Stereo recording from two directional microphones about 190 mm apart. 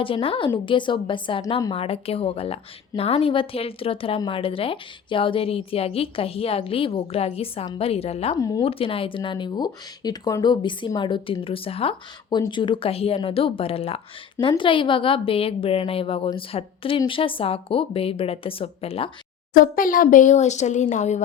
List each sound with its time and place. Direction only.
0.0 s a woman's voice: 30° left (ahead or behind)
8.4 s speech: 20° left (ahead or behind)
8.6 s a woman's voice: 30° left (ahead or behind)
19.5 s speech: 45° left (ahead or behind)